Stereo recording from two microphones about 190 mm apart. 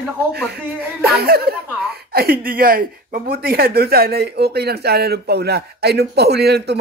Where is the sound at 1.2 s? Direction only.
55° right (ahead or behind).